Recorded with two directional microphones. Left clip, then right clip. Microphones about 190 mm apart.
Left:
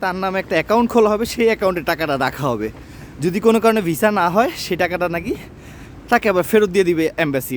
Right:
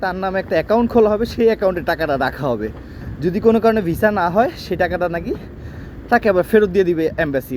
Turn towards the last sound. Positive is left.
turn(degrees=35)  # may be behind; listen again after turning